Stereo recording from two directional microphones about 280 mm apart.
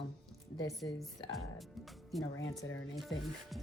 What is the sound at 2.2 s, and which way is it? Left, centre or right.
Speech, left.